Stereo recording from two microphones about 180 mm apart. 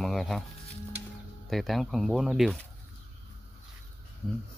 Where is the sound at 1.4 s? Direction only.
Centre (ahead or behind).